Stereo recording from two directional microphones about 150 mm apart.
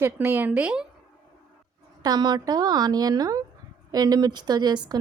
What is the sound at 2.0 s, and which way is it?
A woman's voice, 25° right (ahead or behind).